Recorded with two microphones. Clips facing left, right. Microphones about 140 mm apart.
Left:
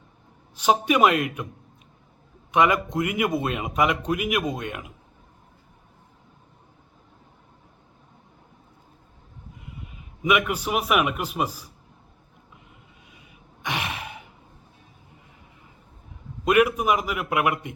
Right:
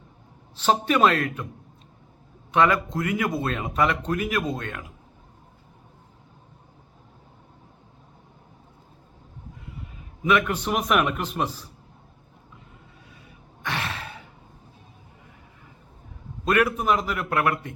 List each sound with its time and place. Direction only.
0.5 s a man's voice: 10° left (ahead or behind)
2.5 s a man's voice: 15° left (ahead or behind)
10.2 s a man's voice: 10° left (ahead or behind)
13.1 s a sound: 15° left (ahead or behind)
16.4 s a man's voice: 15° left (ahead or behind)